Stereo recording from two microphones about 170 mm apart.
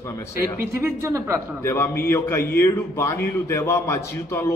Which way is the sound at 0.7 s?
15° right (ahead or behind).